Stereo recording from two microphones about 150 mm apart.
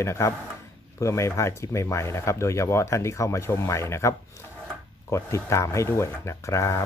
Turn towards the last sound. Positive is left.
turn(degrees=20)  # may be behind; listen again after turning